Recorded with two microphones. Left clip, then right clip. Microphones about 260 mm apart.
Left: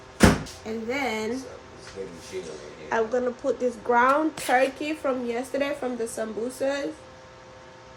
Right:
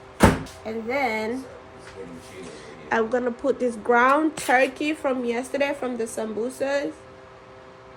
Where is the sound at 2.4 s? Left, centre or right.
Right.